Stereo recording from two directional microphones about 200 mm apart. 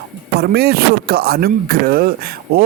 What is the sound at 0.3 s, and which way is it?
Speech, 50° right (ahead or behind).